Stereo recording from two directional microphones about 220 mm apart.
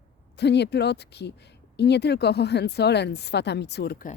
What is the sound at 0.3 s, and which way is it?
Speech, 50° left (ahead or behind).